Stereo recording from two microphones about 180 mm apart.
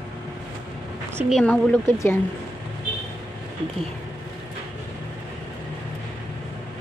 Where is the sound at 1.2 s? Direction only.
Centre (ahead or behind).